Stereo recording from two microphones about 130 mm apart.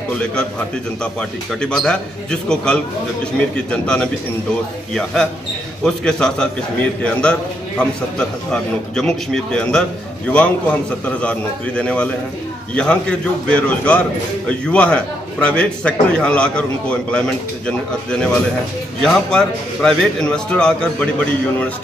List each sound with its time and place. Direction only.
1.0 s a man's voice: 5° left (ahead or behind)
18.9 s a man's voice: 5° left (ahead or behind)